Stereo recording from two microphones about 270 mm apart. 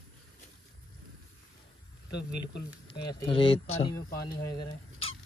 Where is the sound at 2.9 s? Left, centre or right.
Centre.